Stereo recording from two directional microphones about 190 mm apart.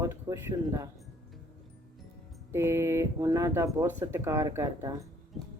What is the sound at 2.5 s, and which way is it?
Speech, 15° right (ahead or behind).